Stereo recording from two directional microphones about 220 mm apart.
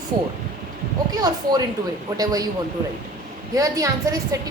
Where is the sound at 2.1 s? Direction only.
15° right (ahead or behind).